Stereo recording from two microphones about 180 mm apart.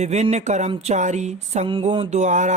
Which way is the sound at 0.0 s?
40° right (ahead or behind).